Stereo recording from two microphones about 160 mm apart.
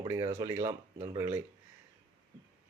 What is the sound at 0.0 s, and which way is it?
Speech, 25° right (ahead or behind).